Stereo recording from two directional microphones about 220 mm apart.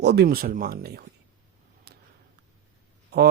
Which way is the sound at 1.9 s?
50° right (ahead or behind).